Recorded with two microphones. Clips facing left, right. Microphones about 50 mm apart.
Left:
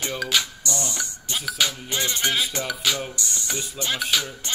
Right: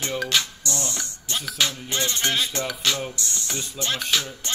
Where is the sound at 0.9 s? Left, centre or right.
Centre.